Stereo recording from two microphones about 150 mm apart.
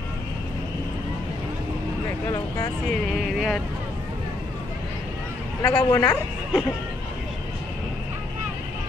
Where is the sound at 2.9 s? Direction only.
Centre (ahead or behind).